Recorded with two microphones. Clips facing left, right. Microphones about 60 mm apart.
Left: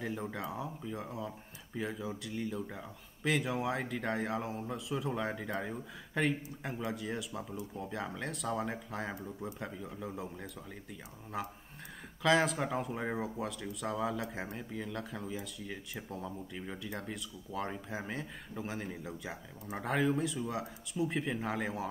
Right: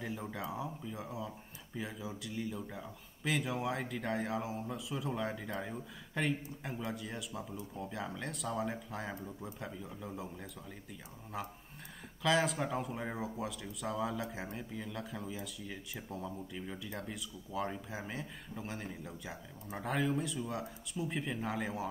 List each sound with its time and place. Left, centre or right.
0.0 s speech: centre
16.5 s speech: centre
16.8 s speech: centre